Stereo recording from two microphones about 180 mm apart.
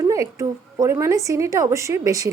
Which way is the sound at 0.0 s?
20° right (ahead or behind).